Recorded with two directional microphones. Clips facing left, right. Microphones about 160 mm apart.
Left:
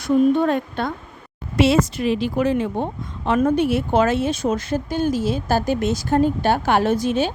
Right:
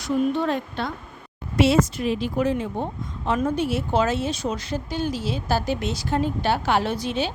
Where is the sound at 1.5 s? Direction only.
90° left; by 2.8 s 70° left (ahead or behind).